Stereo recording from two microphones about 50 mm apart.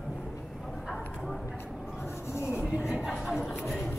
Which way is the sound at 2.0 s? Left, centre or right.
Left.